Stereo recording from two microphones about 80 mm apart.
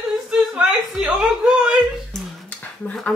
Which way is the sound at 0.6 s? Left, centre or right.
Centre.